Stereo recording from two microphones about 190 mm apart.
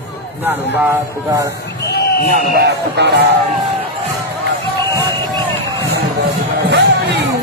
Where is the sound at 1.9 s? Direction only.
55° left (ahead or behind).